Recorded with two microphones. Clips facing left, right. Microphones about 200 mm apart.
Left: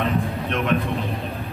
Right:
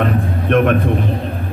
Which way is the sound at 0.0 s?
55° right (ahead or behind).